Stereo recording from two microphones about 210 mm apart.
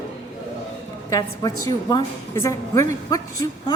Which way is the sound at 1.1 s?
15° left (ahead or behind).